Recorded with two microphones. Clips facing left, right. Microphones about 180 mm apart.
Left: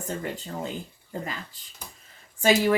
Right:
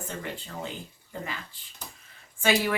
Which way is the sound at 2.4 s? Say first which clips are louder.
Left 4 dB; 40° left (ahead or behind).